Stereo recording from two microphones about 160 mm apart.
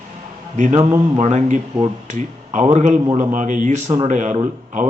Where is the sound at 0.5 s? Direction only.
45° right (ahead or behind).